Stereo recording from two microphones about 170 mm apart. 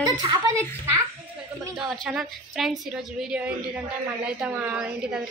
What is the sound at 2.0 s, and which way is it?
A woman's voice, centre (ahead or behind).